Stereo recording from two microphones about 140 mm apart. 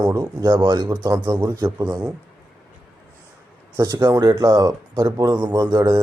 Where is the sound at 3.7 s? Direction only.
25° right (ahead or behind).